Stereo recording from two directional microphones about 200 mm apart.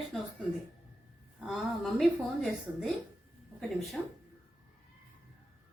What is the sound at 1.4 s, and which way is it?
A woman's voice, centre (ahead or behind).